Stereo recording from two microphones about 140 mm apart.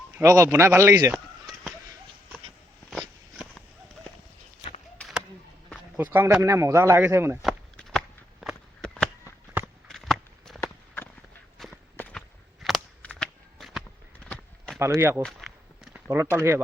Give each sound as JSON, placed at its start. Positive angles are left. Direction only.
{"t": 0.1, "sound": "speech", "side_deg": -20}
{"t": 5.0, "sound": "chop", "side_deg": 10}
{"t": 5.7, "sound": "speech", "side_deg": -15}
{"t": 7.4, "sound": "a sound", "side_deg": 0}
{"t": 9.6, "sound": "walk", "side_deg": -15}
{"t": 9.9, "sound": "walk", "side_deg": 0}
{"t": 10.6, "sound": "walk", "side_deg": 15}
{"t": 11.6, "sound": "walk", "side_deg": 0}
{"t": 12.6, "sound": "a sound", "side_deg": 5}
{"t": 14.8, "sound": "speech", "side_deg": -20}
{"t": 15.2, "sound": "a sound", "side_deg": 0}
{"t": 16.0, "sound": "speech", "side_deg": -15}